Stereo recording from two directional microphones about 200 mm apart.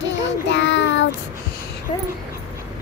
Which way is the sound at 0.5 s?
65° left (ahead or behind).